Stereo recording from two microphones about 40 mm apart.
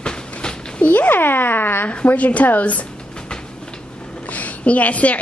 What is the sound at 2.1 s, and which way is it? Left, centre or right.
Speech, left.